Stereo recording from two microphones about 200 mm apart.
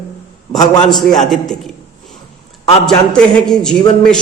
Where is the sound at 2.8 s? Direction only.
5° left (ahead or behind).